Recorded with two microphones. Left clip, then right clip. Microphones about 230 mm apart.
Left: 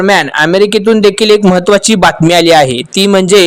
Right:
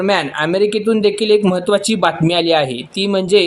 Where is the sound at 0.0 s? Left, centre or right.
Left.